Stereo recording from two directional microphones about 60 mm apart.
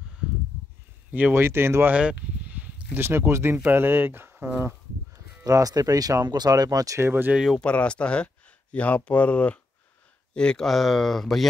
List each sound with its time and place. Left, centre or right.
1.3 s speech: right
1.9 s a sound: right
3.0 s speech: right
5.4 s speech: right
7.0 s speech: right
7.6 s speech: centre
10.7 s speech: centre